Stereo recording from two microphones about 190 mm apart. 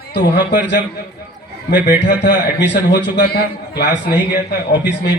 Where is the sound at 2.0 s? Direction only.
65° left (ahead or behind).